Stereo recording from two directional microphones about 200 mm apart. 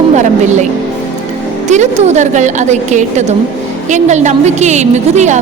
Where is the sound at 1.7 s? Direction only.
35° right (ahead or behind).